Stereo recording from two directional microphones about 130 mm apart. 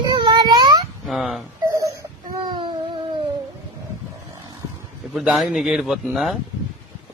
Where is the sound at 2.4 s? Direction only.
35° right (ahead or behind).